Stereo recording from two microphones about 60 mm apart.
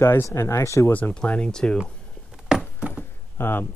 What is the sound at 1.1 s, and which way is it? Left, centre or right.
Speech, centre.